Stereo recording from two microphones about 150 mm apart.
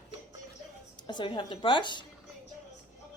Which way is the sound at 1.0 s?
30° left (ahead or behind).